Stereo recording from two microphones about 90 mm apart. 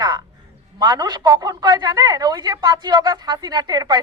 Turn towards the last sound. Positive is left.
turn(degrees=-45)  # may be behind; listen again after turning